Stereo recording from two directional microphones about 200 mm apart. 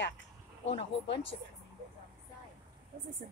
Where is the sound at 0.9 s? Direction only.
65° left (ahead or behind).